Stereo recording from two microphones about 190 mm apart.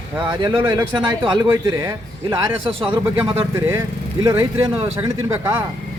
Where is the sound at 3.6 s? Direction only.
15° right (ahead or behind).